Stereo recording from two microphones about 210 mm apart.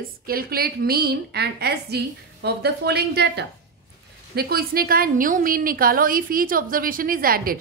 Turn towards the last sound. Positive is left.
turn(degrees=-45)  # may be behind; listen again after turning